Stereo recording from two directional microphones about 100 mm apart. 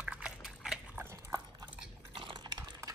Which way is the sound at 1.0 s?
25° right (ahead or behind).